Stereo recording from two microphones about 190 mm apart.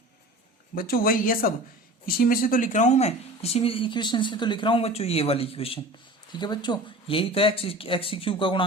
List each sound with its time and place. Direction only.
0.8 s speech: 50° left (ahead or behind); by 8.6 s 25° left (ahead or behind)